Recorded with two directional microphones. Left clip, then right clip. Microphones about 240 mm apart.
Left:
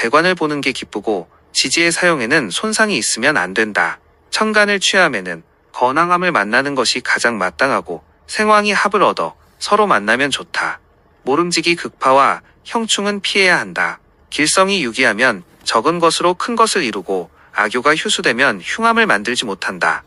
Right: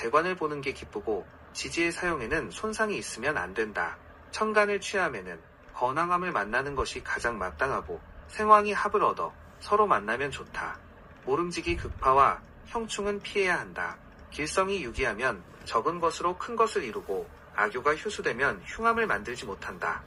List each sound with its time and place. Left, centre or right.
0.0 s speech: left